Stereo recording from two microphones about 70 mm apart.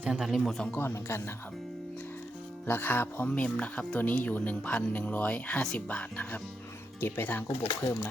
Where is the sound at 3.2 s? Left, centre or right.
Centre.